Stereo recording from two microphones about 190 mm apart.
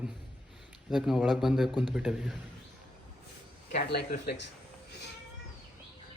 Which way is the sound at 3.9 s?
60° left (ahead or behind).